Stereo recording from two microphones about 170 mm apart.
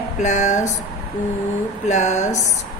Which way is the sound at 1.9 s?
45° left (ahead or behind).